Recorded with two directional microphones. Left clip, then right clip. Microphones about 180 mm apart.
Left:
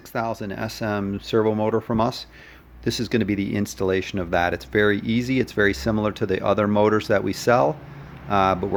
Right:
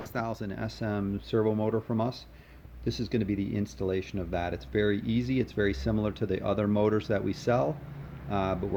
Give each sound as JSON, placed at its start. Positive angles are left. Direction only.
{"t": 0.1, "sound": "speech", "side_deg": 25}